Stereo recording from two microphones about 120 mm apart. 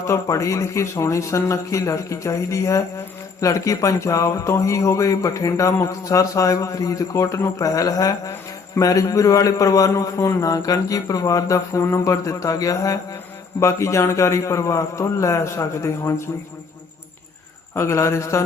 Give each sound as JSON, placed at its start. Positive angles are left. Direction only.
{"t": 0.1, "sound": "speech", "side_deg": 25}
{"t": 17.7, "sound": "speech", "side_deg": 25}